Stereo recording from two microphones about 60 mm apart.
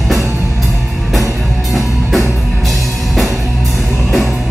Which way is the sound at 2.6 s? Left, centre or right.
Centre.